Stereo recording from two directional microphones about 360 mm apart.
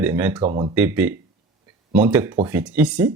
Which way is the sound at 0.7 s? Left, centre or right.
Centre.